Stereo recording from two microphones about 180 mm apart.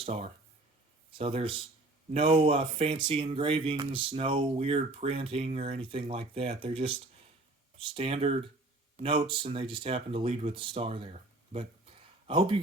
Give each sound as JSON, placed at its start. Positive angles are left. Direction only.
{"t": 0.0, "sound": "speech", "side_deg": -35}
{"t": 7.9, "sound": "speech", "side_deg": -35}